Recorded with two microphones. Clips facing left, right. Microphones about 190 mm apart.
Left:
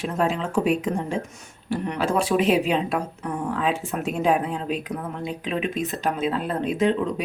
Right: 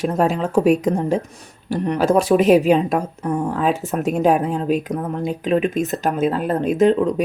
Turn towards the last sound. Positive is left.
turn(degrees=-45)  # may be behind; listen again after turning